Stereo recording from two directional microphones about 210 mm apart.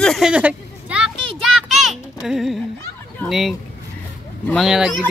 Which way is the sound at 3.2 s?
Centre (ahead or behind).